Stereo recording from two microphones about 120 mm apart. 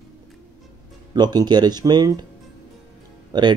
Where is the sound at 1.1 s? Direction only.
35° right (ahead or behind).